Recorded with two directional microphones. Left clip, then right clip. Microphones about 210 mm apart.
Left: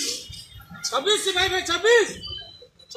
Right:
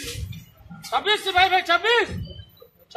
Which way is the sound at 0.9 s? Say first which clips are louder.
Right 2 dB; 20° right (ahead or behind).